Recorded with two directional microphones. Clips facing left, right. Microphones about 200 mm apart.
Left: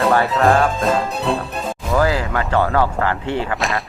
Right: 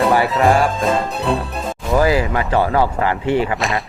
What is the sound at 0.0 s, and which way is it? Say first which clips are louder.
Speech: right 1 dB; 5° right (ahead or behind).